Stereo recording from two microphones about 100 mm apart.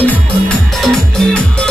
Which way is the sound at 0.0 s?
15° left (ahead or behind).